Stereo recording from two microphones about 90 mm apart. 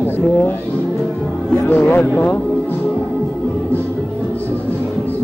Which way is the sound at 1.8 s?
10° left (ahead or behind).